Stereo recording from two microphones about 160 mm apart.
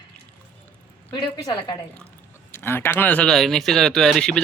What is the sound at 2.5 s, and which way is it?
Speech, 15° left (ahead or behind).